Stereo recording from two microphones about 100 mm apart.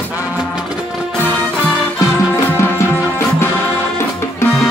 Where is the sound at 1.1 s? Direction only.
20° left (ahead or behind).